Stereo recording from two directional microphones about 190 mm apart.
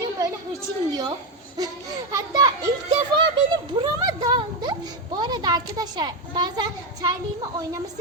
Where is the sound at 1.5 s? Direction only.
20° right (ahead or behind).